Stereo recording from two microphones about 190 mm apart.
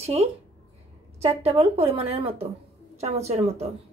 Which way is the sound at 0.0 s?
35° right (ahead or behind).